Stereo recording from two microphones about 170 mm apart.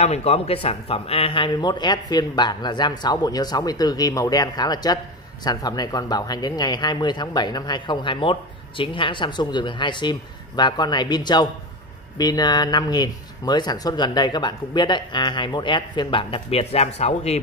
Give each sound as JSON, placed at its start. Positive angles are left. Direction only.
{"t": 0.0, "sound": "speech", "side_deg": 40}